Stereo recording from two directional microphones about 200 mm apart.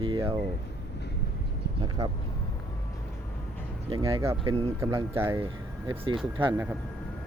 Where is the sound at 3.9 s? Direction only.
25° right (ahead or behind).